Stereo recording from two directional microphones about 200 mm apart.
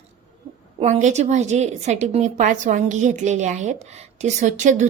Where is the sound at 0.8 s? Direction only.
35° right (ahead or behind).